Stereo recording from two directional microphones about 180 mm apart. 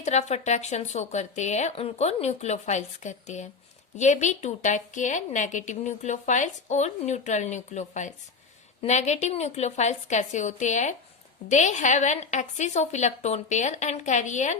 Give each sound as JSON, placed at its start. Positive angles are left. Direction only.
{"t": 0.0, "sound": "a woman's voice", "side_deg": 40}